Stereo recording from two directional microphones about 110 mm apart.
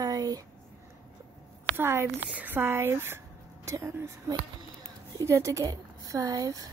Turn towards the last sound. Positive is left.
turn(degrees=-35)  # may be behind; listen again after turning